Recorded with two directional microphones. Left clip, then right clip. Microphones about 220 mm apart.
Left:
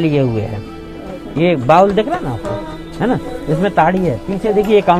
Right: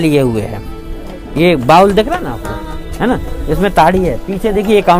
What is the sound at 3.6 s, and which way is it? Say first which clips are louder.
Speech: right 4 dB; 50° right (ahead or behind).